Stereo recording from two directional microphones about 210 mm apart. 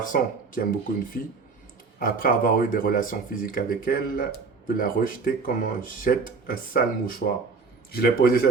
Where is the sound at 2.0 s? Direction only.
40° left (ahead or behind).